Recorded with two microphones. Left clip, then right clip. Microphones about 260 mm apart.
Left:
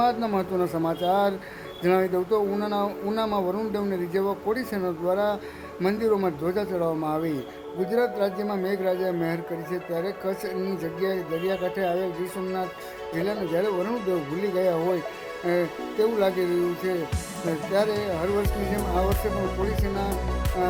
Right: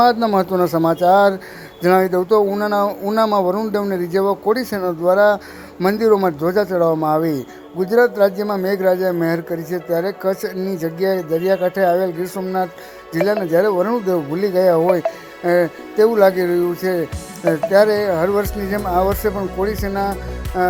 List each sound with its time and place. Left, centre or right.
0.0 s speech: right